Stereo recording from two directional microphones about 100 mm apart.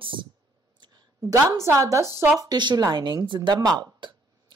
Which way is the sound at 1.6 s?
30° right (ahead or behind).